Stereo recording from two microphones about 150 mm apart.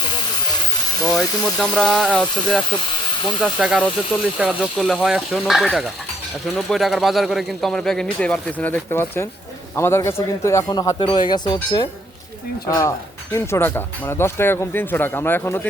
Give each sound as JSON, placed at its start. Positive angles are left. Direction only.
{"t": 1.0, "sound": "a man's voice", "side_deg": 0}
{"t": 13.3, "sound": "speech", "side_deg": 15}